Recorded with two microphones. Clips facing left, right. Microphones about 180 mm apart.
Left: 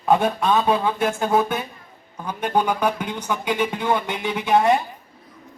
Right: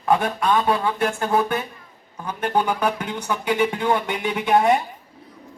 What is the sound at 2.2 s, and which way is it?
Music, 10° left (ahead or behind).